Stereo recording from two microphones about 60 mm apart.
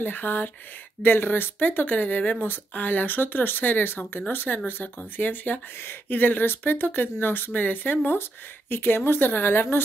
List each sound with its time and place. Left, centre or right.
0.0 s speech: left